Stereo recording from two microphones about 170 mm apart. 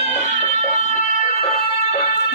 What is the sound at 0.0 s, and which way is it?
Music, 45° left (ahead or behind).